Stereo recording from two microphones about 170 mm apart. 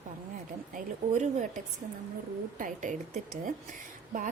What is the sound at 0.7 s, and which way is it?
A woman's voice, 45° right (ahead or behind).